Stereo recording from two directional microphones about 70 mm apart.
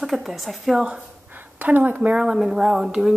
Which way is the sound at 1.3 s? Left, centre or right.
Right.